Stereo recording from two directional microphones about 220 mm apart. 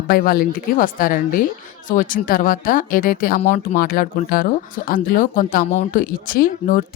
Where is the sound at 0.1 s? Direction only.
40° left (ahead or behind).